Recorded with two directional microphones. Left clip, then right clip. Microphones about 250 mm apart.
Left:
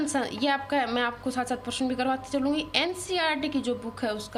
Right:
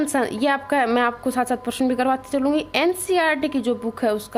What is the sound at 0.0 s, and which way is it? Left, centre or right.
A woman's voice, right.